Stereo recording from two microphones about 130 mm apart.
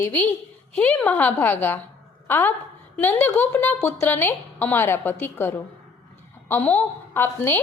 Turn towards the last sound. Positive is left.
turn(degrees=15)  # may be behind; listen again after turning